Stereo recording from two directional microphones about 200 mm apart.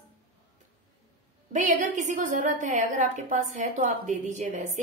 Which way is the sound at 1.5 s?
40° right (ahead or behind).